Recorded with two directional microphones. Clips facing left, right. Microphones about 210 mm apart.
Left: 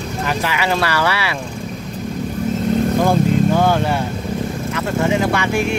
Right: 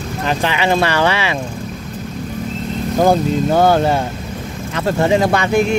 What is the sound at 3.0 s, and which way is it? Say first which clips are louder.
Speech: right 6 dB; 40° right (ahead or behind).